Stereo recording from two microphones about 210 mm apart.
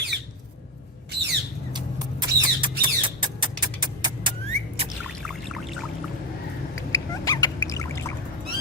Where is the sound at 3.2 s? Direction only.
20° right (ahead or behind).